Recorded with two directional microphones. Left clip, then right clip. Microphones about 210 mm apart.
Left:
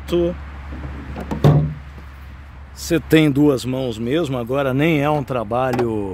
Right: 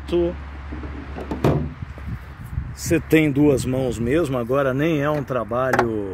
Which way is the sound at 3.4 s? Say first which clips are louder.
Left 1 dB; 15° left (ahead or behind).